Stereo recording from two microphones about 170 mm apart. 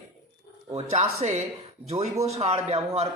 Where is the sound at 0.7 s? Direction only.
40° right (ahead or behind).